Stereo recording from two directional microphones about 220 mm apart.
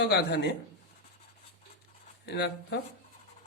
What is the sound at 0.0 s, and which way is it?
Speech, 50° left (ahead or behind).